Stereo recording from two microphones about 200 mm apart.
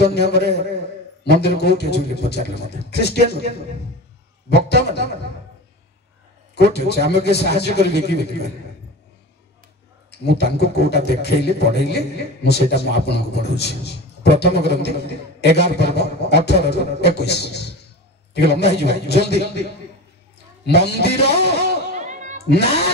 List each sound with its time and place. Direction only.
0.1 s a man's voice: 55° left (ahead or behind)
6.5 s a man's voice: 55° left (ahead or behind)
10.2 s a man's voice: 55° left (ahead or behind)
21.5 s music: 55° left (ahead or behind)
21.9 s a sound: 35° right (ahead or behind)
22.5 s a man's voice: 55° left (ahead or behind)